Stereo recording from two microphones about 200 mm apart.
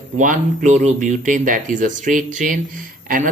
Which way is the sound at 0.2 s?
40° right (ahead or behind).